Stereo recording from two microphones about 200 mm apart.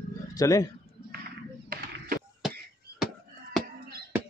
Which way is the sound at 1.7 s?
45° right (ahead or behind).